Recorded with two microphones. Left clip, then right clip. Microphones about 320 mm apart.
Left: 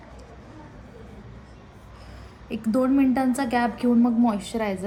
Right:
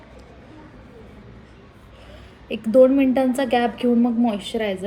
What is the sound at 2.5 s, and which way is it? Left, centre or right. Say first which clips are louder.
A woman's voice: right 9 dB; centre.